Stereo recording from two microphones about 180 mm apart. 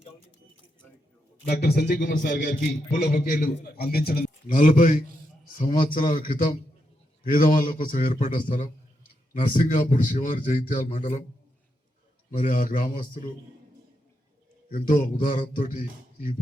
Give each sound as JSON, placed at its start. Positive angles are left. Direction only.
{"t": 1.5, "sound": "a man's voice", "side_deg": 60}
{"t": 12.3, "sound": "a man's voice", "side_deg": 45}
{"t": 14.7, "sound": "a man's voice", "side_deg": 50}